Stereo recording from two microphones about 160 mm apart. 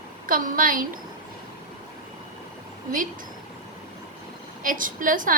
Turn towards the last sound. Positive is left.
turn(degrees=-55)  # may be behind; listen again after turning